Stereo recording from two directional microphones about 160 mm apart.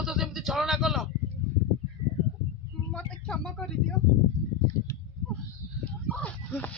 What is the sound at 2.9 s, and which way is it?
Speech, 5° left (ahead or behind).